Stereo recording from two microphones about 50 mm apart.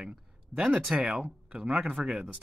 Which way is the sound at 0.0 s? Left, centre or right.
Centre.